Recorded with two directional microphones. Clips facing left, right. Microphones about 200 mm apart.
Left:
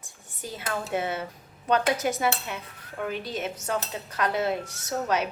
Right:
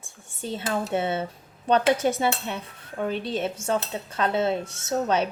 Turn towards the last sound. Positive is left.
turn(degrees=-30)  # may be behind; listen again after turning